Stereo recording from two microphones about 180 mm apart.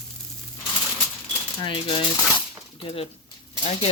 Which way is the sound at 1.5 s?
30° left (ahead or behind).